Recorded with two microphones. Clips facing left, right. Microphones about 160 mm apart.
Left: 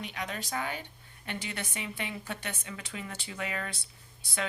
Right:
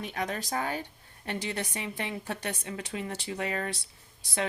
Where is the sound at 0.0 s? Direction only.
45° right (ahead or behind).